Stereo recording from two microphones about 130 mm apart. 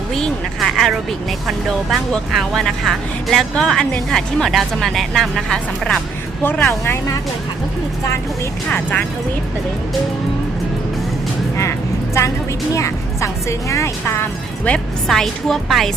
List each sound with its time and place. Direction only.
0.1 s speech: 5° left (ahead or behind); by 7.2 s 20° left (ahead or behind)
8.7 s speech: 10° left (ahead or behind)
12.7 s speech: 25° left (ahead or behind)
14.6 s speech: 5° left (ahead or behind)